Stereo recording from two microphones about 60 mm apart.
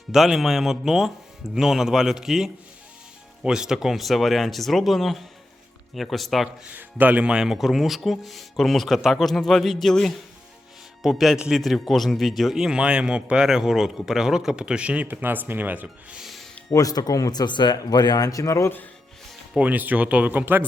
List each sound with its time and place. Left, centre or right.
0.1 s a man's voice: centre
6.7 s speech: right
7.3 s a man's voice: centre
15.0 s speech: right
16.1 s music: centre
16.7 s a man's voice: left
19.5 s speech: right
20.4 s speech: right